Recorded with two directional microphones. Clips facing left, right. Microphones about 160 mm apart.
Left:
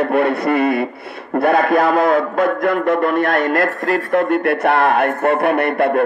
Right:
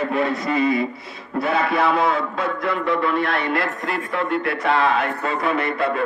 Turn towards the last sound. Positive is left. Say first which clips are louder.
# left 6 dB
turn(degrees=60)  # may be behind; listen again after turning